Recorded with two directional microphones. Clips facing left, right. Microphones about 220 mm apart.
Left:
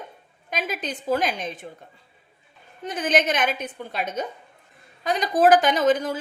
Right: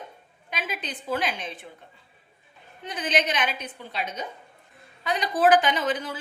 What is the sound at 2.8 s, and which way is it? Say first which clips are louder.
A woman's voice: left 4 dB; 45° left (ahead or behind).